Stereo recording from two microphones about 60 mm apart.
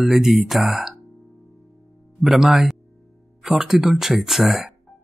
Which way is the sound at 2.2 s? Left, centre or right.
Centre.